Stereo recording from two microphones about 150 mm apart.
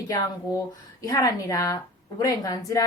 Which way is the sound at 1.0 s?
25° left (ahead or behind).